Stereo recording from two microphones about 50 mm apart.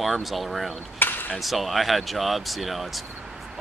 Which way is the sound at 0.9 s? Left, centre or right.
Left.